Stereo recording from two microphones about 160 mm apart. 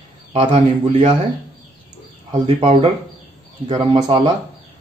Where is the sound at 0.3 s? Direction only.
35° right (ahead or behind).